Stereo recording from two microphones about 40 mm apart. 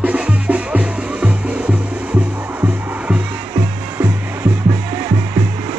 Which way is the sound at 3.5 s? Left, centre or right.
Right.